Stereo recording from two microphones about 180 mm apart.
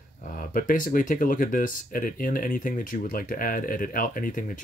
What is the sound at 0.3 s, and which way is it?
Speech, 50° left (ahead or behind).